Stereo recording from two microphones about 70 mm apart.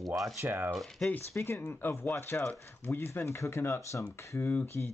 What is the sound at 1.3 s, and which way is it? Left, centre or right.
Speech, left.